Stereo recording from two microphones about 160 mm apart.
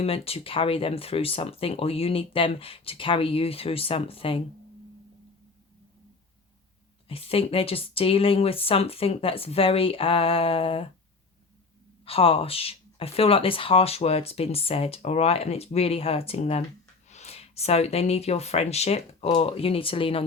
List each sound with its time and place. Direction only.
0.0 s speech: 35° left (ahead or behind)
7.1 s speech: 35° left (ahead or behind)
12.0 s speech: 35° left (ahead or behind)